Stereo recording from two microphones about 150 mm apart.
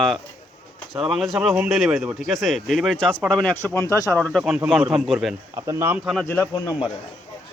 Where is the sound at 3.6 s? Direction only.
15° left (ahead or behind).